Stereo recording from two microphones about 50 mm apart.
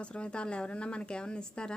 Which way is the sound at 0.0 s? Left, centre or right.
Left.